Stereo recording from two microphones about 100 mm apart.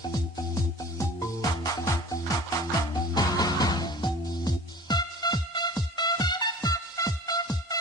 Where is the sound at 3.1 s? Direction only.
40° left (ahead or behind).